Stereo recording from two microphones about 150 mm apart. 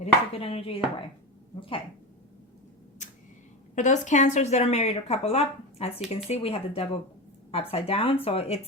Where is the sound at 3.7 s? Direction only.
55° left (ahead or behind).